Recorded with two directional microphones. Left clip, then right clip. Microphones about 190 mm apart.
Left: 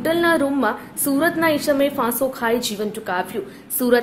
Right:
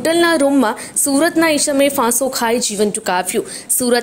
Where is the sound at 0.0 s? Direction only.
40° right (ahead or behind).